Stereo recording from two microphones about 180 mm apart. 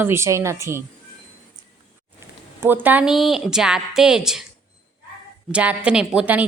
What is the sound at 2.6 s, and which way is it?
A woman's voice, 10° right (ahead or behind).